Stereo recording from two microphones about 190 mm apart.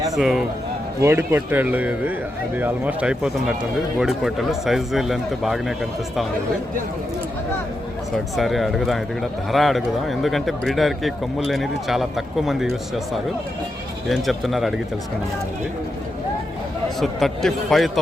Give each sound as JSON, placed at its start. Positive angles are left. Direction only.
{"t": 0.2, "sound": "a man's voice", "side_deg": 0}
{"t": 8.1, "sound": "speech", "side_deg": 0}
{"t": 14.1, "sound": "speech", "side_deg": 0}
{"t": 17.0, "sound": "speech", "side_deg": 0}